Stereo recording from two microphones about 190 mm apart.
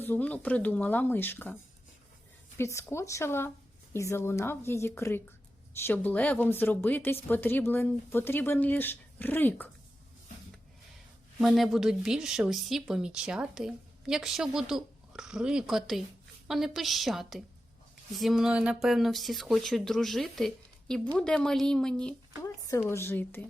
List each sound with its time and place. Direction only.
0.0 s speech: 10° left (ahead or behind)
2.6 s speech: 15° left (ahead or behind)
11.3 s speech: centre (ahead or behind)
22.4 s speech: 15° left (ahead or behind)